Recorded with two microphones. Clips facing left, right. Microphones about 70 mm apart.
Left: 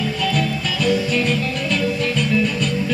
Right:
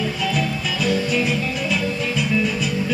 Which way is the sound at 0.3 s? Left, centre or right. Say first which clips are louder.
Left 1 dB; centre.